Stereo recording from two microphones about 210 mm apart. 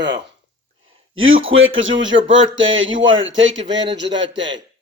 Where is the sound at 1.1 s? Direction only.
70° right (ahead or behind).